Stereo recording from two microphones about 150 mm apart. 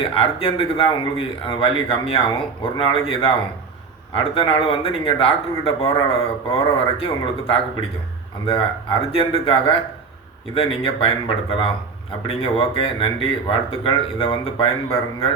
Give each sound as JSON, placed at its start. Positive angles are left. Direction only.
{"t": 0.0, "sound": "speech", "side_deg": 40}